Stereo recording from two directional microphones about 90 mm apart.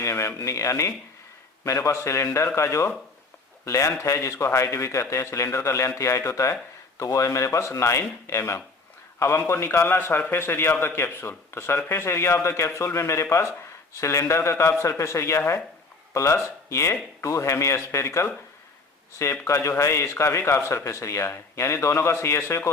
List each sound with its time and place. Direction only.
0.0 s a man's voice: 30° left (ahead or behind)